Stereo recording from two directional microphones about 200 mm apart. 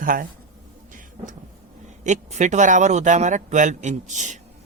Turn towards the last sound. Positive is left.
turn(degrees=-35)  # may be behind; listen again after turning